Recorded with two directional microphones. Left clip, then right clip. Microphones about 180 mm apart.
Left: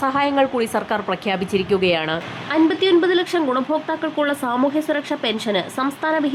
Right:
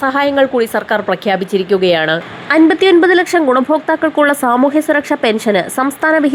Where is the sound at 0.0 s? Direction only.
15° right (ahead or behind).